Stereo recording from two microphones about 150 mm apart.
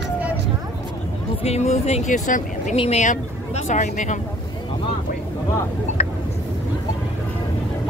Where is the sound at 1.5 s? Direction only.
45° left (ahead or behind).